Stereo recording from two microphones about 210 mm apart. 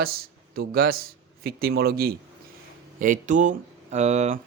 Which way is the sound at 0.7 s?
45° right (ahead or behind).